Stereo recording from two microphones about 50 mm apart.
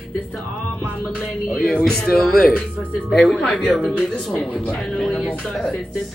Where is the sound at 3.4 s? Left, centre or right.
Centre.